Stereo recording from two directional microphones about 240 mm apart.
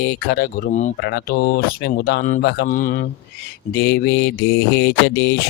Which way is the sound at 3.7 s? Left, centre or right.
Left.